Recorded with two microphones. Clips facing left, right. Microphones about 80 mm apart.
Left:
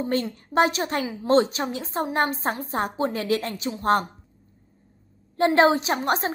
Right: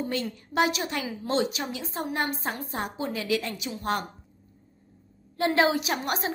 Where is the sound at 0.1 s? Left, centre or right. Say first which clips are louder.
Left 6 dB; left.